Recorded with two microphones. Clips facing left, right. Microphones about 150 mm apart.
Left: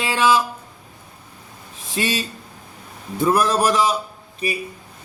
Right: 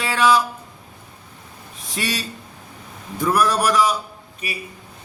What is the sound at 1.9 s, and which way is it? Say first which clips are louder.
A man's voice: left 3 dB; 25° left (ahead or behind).